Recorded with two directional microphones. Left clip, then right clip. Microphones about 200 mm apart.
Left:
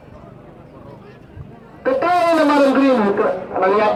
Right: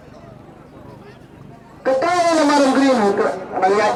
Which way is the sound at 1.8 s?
40° left (ahead or behind).